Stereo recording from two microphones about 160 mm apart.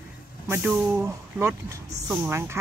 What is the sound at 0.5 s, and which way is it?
Speech, 10° right (ahead or behind).